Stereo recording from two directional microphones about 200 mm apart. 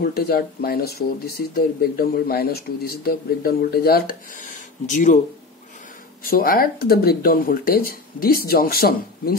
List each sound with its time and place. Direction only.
0.0 s speech: 50° left (ahead or behind)
6.2 s speech: 45° left (ahead or behind)